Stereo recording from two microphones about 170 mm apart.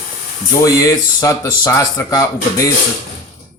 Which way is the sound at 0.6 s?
20° left (ahead or behind).